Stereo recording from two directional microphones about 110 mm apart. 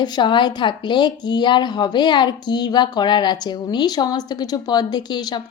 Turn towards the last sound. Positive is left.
turn(degrees=35)  # may be behind; listen again after turning